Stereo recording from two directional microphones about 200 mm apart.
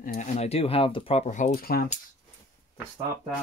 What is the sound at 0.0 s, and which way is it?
Speech, 40° left (ahead or behind).